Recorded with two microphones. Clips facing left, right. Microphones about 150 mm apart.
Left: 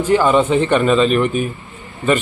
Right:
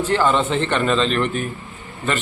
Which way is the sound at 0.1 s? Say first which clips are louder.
Left 6 dB; 10° left (ahead or behind).